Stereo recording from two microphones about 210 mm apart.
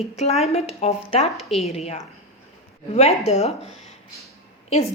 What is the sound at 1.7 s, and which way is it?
A woman's voice, 30° left (ahead or behind).